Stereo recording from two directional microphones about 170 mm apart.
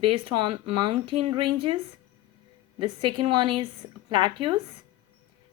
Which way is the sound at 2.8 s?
30° right (ahead or behind).